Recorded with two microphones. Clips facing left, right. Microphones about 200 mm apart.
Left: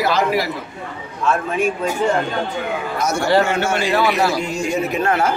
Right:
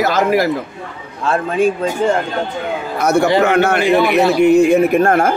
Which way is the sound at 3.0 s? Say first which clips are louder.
Right 4 dB; 60° right (ahead or behind).